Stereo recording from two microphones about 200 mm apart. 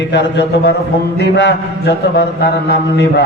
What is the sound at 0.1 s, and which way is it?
A man's voice, 60° left (ahead or behind).